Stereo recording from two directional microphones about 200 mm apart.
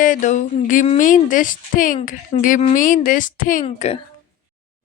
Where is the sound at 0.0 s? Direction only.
40° left (ahead or behind).